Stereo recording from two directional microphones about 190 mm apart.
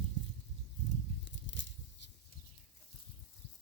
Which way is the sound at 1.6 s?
75° left (ahead or behind).